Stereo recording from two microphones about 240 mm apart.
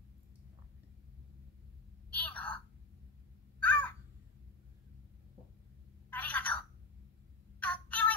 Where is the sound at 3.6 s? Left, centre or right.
Centre.